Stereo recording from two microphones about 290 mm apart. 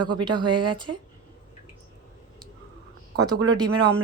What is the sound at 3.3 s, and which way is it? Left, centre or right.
Speech, right.